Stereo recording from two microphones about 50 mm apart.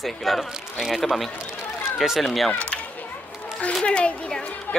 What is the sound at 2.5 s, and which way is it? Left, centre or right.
Speech, left.